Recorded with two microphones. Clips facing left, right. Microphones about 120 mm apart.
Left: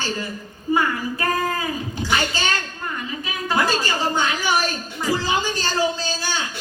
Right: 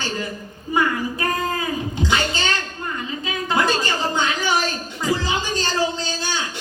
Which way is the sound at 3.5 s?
20° right (ahead or behind).